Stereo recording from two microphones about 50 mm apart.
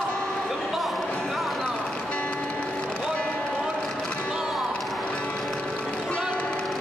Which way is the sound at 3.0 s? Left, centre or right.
Centre.